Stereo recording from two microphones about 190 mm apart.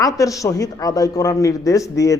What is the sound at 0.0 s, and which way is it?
A man's voice, 15° left (ahead or behind).